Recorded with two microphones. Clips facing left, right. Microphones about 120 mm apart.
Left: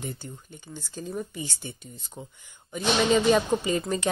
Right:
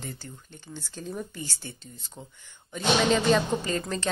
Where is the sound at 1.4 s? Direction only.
15° left (ahead or behind).